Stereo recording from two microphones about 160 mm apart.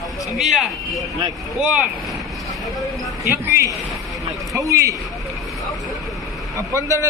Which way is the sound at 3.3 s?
20° right (ahead or behind).